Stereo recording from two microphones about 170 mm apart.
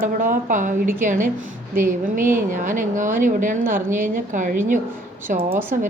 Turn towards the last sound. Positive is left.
turn(degrees=-10)  # may be behind; listen again after turning